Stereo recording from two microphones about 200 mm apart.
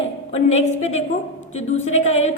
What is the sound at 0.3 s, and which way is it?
A woman's voice, 30° left (ahead or behind).